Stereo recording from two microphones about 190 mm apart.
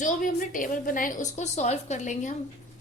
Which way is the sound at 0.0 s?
45° left (ahead or behind).